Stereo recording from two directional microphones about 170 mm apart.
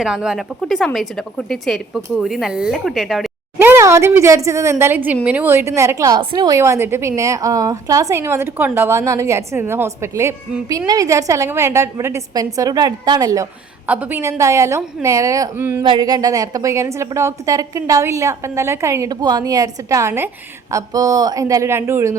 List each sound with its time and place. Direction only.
0.0 s speech: 5° right (ahead or behind)
3.6 s a woman's voice: 15° right (ahead or behind)
13.8 s a woman's voice: 10° right (ahead or behind)
15.8 s a woman's voice: 25° right (ahead or behind)